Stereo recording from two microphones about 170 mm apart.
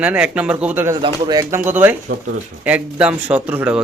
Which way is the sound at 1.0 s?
20° right (ahead or behind).